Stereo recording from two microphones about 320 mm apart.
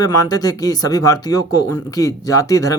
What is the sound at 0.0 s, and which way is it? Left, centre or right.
Speech, centre.